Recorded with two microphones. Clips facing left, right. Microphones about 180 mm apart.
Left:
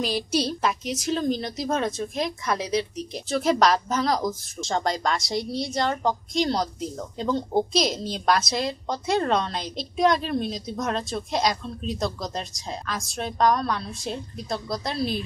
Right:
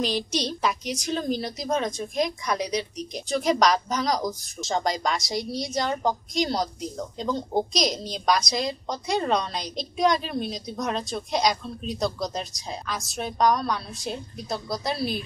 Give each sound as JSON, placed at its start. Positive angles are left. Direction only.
{"t": 0.0, "sound": "a woman's voice", "side_deg": 5}
{"t": 3.1, "sound": "a woman's voice", "side_deg": 5}